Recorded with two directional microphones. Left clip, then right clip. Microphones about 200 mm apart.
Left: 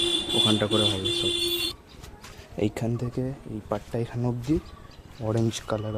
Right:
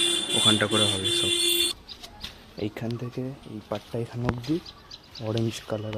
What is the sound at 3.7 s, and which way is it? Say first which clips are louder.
Speech: left 2 dB; 5° left (ahead or behind).